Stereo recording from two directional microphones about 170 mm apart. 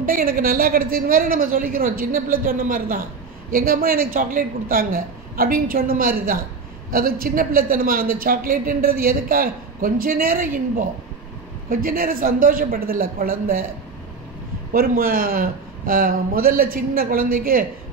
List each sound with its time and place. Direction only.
0.0 s a man's voice: 55° right (ahead or behind)
14.7 s a man's voice: 60° right (ahead or behind)